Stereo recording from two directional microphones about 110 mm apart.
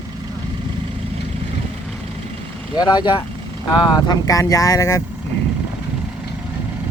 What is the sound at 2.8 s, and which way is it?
Speech, 40° left (ahead or behind).